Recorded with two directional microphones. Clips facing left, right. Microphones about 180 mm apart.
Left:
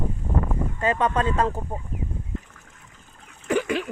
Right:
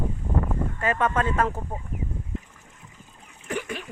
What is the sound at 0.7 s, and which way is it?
Speech, 20° left (ahead or behind).